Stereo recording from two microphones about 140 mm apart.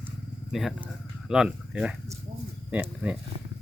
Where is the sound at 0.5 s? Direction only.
Centre (ahead or behind).